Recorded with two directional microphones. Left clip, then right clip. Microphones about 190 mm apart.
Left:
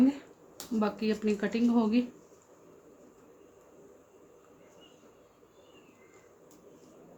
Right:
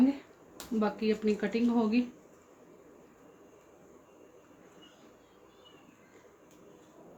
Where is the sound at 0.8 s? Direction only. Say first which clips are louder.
Right 1 dB; 15° left (ahead or behind).